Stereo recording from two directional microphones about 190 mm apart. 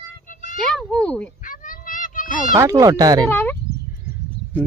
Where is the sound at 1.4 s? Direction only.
45° left (ahead or behind).